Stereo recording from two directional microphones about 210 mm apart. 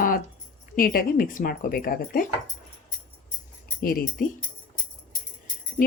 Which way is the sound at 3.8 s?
45° left (ahead or behind).